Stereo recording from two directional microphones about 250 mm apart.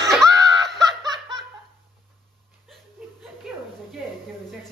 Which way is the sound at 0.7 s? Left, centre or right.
Centre.